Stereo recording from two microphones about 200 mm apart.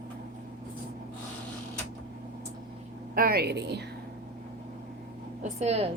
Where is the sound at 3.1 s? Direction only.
50° right (ahead or behind).